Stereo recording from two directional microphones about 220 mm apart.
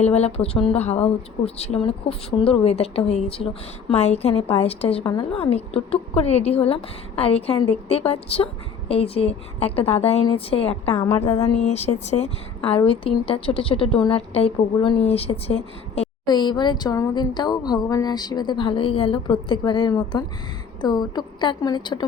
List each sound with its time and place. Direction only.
0.0 s a woman's voice: 30° left (ahead or behind)
11.5 s a woman's voice: 30° left (ahead or behind)